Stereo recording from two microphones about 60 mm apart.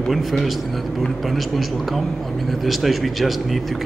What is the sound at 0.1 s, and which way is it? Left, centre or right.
Speech, centre.